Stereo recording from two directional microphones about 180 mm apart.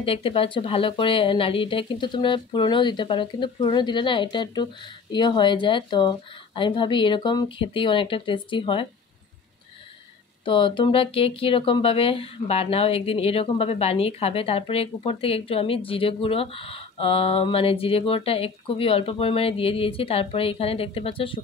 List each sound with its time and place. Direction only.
0.0 s speech: 30° left (ahead or behind)
10.4 s speech: 30° left (ahead or behind)